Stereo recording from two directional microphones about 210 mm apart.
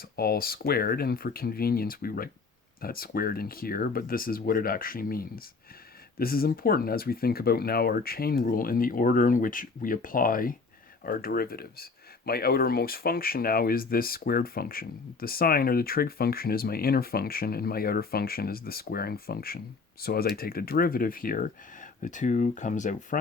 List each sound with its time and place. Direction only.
0.0 s speech: 45° left (ahead or behind)